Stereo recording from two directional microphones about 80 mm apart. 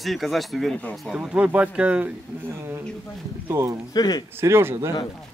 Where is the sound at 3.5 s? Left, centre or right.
Right.